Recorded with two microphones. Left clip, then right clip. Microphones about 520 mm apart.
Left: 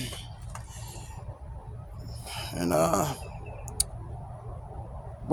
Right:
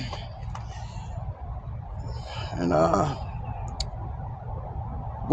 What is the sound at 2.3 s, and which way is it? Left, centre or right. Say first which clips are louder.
Speech: right 2 dB; left.